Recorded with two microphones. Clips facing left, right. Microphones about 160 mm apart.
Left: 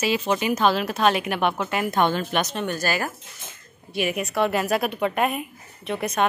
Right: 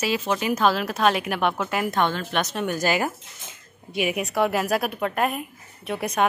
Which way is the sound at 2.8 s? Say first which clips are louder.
Right 3 dB; 15° right (ahead or behind).